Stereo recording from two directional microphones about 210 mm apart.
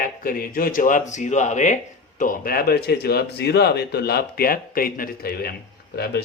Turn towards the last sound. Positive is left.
turn(degrees=50)  # may be behind; listen again after turning